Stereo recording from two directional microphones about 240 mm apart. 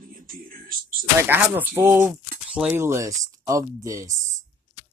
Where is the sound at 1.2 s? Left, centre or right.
Centre.